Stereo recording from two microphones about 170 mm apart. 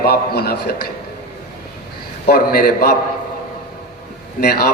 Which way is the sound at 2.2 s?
60° left (ahead or behind).